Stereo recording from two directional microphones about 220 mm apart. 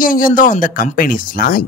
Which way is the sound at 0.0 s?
40° left (ahead or behind).